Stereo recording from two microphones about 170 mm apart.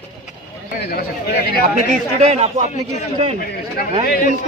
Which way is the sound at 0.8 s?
65° left (ahead or behind).